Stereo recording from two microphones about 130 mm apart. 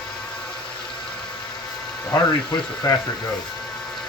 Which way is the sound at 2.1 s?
25° left (ahead or behind).